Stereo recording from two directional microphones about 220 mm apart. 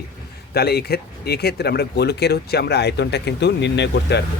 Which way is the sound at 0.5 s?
45° left (ahead or behind).